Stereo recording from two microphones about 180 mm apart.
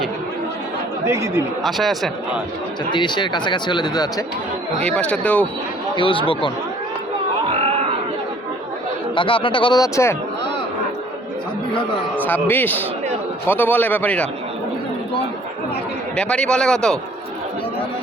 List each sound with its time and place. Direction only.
1.0 s speech: 15° right (ahead or behind)
1.6 s a man's voice: centre (ahead or behind)
2.9 s speech: 25° left (ahead or behind)
4.9 s speech: 5° left (ahead or behind)
6.0 s speech: 30° left (ahead or behind)
7.5 s crowd: 35° right (ahead or behind)
9.1 s speech: 30° left (ahead or behind)
12.2 s speech: 10° left (ahead or behind)
16.1 s a man's voice: 5° left (ahead or behind)